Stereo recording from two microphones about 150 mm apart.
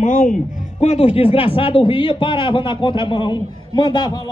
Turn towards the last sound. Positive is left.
turn(degrees=30)  # may be behind; listen again after turning